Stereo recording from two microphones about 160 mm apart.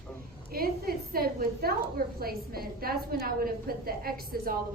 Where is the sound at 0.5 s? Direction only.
70° right (ahead or behind).